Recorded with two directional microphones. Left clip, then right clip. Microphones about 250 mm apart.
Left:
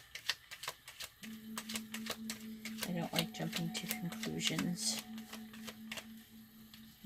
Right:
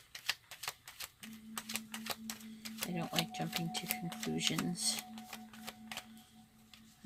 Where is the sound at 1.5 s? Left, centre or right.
Right.